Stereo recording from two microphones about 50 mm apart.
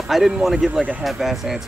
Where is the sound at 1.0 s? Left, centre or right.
Centre.